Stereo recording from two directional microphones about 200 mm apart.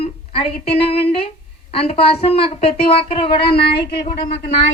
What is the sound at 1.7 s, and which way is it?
Speech, 30° left (ahead or behind).